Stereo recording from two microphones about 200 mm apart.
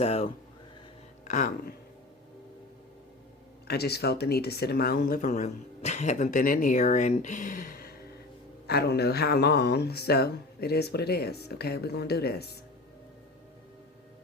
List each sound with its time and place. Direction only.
0.0 s speech: 30° left (ahead or behind)
3.7 s speech: 55° left (ahead or behind)